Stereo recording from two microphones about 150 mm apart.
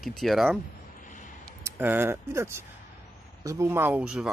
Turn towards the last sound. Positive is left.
turn(degrees=-5)  # may be behind; listen again after turning